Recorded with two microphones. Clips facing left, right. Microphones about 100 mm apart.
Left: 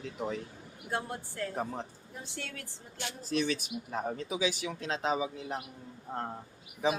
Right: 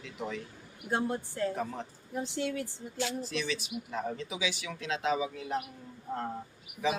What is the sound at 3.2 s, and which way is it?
Speech, 40° left (ahead or behind).